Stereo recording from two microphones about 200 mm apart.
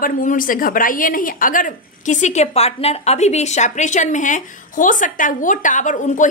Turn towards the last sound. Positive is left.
turn(degrees=40)  # may be behind; listen again after turning